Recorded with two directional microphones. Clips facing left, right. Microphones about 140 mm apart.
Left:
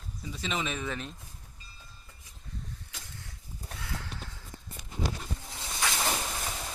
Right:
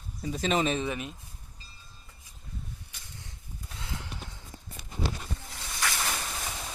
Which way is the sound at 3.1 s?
20° right (ahead or behind).